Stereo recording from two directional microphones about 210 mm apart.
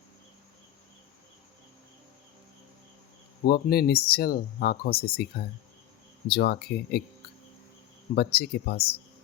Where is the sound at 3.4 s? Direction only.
45° left (ahead or behind).